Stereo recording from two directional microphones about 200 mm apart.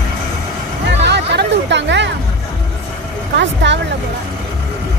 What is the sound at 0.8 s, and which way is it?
Music, 60° right (ahead or behind).